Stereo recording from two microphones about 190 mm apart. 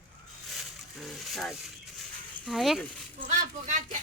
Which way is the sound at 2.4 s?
Centre (ahead or behind).